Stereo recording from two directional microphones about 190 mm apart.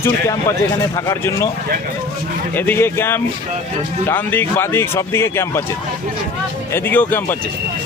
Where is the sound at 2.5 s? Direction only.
10° left (ahead or behind).